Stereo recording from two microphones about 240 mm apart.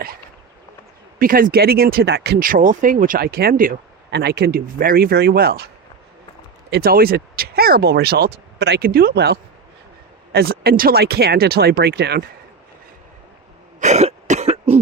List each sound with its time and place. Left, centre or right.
1.2 s speech: right
6.7 s speech: right
13.7 s cough: right